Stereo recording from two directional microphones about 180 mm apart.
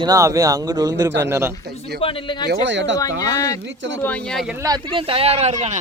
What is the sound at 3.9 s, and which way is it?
Speech, 10° left (ahead or behind).